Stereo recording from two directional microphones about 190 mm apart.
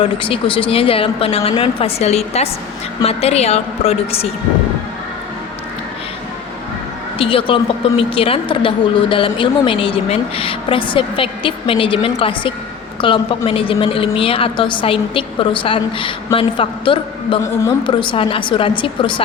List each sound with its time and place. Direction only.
0.0 s a woman's voice: 30° left (ahead or behind)
7.2 s a woman's voice: 30° left (ahead or behind)